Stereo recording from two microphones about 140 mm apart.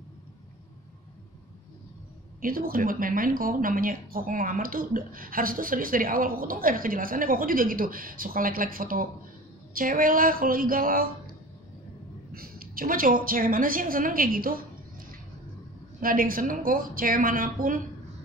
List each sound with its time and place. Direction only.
2.4 s a woman's voice: 90° right
12.3 s a woman's voice: 90° right
16.0 s a woman's voice: 90° right